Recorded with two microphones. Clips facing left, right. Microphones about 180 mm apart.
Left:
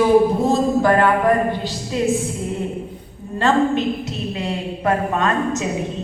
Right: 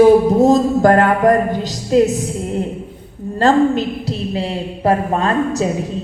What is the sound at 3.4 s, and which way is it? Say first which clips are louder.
A woman's voice: right 4 dB; 35° right (ahead or behind).